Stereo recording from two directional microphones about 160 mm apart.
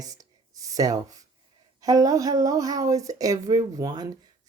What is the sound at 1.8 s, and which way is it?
Speech, 25° right (ahead or behind).